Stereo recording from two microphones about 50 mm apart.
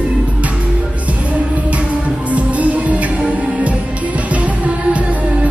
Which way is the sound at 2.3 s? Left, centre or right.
Right.